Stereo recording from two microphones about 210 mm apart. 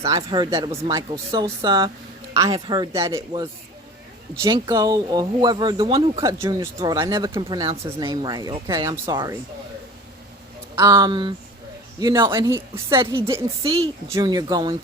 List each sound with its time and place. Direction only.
0.1 s a woman's voice: 20° right (ahead or behind)
6.2 s speech: 15° right (ahead or behind)
10.8 s a woman's voice: 20° right (ahead or behind)